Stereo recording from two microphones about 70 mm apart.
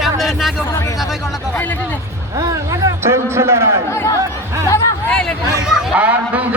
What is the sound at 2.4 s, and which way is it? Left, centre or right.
Speech, right.